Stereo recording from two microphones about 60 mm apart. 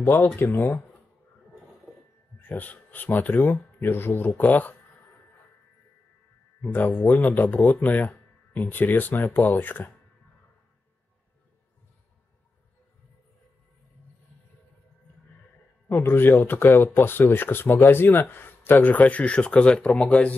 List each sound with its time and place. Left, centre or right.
0.0 s speech: left
2.4 s speech: left
7.2 s speech: left
15.9 s speech: left